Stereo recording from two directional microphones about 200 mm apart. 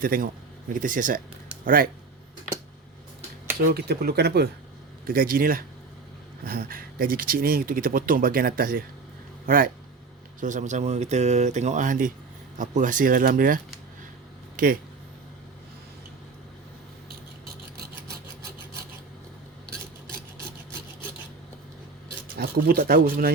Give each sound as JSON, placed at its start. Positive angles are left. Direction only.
{"t": 0.0, "sound": "speech", "side_deg": -45}
{"t": 3.7, "sound": "speech", "side_deg": -50}
{"t": 22.4, "sound": "speech", "side_deg": -50}